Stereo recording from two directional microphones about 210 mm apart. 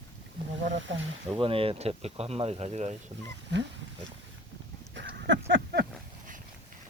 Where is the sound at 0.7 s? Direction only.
60° right (ahead or behind).